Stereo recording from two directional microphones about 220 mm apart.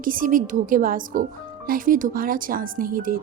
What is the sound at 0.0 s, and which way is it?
Speech, 40° right (ahead or behind).